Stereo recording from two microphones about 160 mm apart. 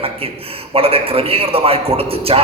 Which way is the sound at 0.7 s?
35° right (ahead or behind).